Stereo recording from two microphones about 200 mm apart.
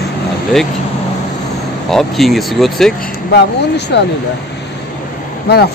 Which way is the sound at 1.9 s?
Centre (ahead or behind).